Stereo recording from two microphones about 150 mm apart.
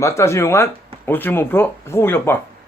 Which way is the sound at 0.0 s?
20° left (ahead or behind).